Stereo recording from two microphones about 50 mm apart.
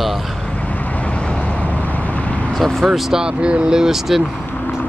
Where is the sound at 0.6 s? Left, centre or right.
Left.